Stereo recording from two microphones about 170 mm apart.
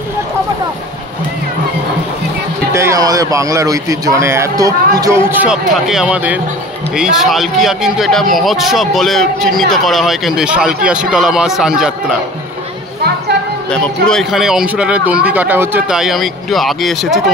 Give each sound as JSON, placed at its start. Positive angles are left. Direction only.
{"t": 2.7, "sound": "a man's voice", "side_deg": -15}
{"t": 14.0, "sound": "a man's voice", "side_deg": 0}